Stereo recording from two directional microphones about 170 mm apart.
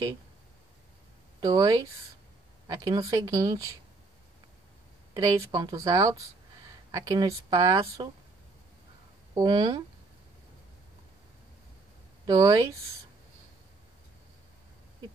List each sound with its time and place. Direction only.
1.4 s speech: 20° right (ahead or behind)
5.1 s speech: 20° right (ahead or behind)
9.3 s speech: 25° right (ahead or behind)
12.3 s speech: 20° right (ahead or behind)